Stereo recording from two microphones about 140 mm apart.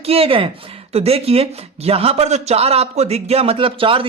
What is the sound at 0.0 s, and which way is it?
Speech, 45° right (ahead or behind).